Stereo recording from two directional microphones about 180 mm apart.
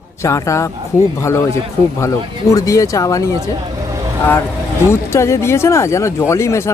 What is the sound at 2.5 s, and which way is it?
Speech, 20° left (ahead or behind).